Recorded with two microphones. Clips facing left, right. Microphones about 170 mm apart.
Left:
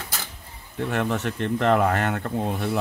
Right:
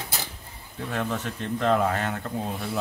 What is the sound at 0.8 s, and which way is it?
Speech, 65° left (ahead or behind).